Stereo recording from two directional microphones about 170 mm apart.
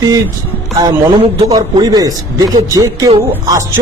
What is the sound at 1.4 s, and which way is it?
A man's voice, 20° right (ahead or behind).